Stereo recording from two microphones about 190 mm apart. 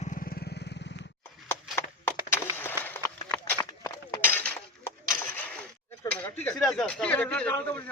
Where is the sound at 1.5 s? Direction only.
15° left (ahead or behind).